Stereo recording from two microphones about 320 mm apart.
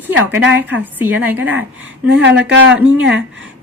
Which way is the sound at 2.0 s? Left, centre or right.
Right.